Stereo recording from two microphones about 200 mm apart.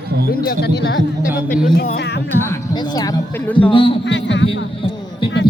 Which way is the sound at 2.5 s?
20° left (ahead or behind).